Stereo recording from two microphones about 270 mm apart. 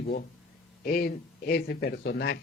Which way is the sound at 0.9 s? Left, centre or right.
Left.